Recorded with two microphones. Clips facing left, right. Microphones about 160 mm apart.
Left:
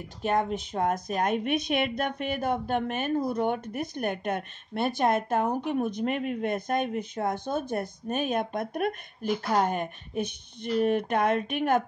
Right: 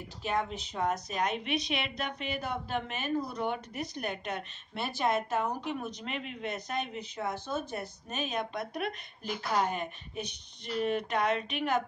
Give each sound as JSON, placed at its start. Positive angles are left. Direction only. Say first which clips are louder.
{"t": 0.2, "sound": "speech", "louder": "left 6 dB", "side_deg": 50}